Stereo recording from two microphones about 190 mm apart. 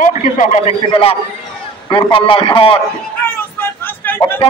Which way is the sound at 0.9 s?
30° left (ahead or behind).